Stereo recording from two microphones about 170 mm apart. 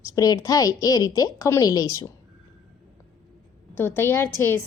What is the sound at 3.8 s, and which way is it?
Speech, 15° left (ahead or behind).